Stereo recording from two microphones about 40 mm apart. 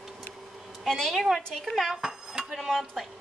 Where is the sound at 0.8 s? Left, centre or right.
Centre.